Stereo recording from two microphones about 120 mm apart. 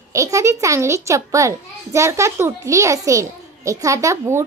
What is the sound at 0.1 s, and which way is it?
A child's voice, 25° right (ahead or behind).